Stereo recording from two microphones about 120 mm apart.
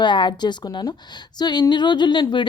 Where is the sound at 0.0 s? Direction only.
40° left (ahead or behind).